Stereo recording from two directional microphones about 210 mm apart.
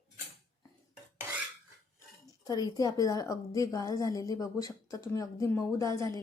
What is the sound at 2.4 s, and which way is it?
A woman's voice, 20° left (ahead or behind).